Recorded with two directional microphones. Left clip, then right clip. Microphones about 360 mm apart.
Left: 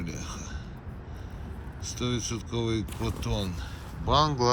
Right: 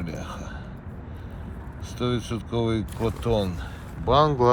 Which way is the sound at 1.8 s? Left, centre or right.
Centre.